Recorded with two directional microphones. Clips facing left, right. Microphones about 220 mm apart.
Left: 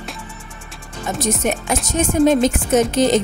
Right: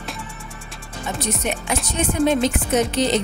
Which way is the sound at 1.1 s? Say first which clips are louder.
Left 5 dB; 45° left (ahead or behind).